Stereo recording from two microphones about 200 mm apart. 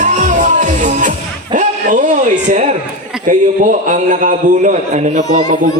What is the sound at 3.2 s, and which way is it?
A man's voice, 40° right (ahead or behind).